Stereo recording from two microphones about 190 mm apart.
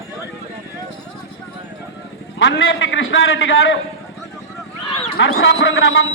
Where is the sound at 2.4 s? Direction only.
85° left.